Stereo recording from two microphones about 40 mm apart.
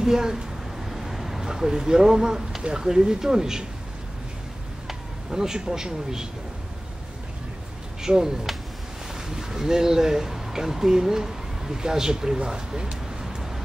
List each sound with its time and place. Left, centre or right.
0.0 s speech: centre
0.8 s a sound: centre
2.6 s speech: centre
4.8 s speech: centre
8.0 s speech: centre
13.2 s vehicle: centre